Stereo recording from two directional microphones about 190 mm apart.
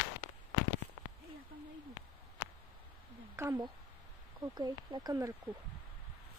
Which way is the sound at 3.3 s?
15° right (ahead or behind).